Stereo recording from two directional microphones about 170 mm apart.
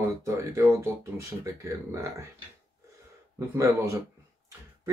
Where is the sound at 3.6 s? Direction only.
15° right (ahead or behind).